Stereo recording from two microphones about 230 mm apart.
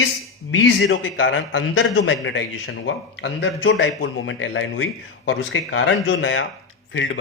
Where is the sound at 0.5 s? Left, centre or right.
Left.